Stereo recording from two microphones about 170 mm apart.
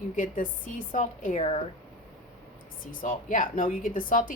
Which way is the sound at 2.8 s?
55° left (ahead or behind).